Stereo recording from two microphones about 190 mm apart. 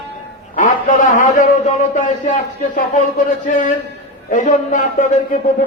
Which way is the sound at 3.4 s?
45° left (ahead or behind).